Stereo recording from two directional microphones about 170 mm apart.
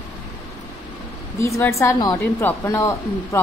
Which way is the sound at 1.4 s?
20° left (ahead or behind).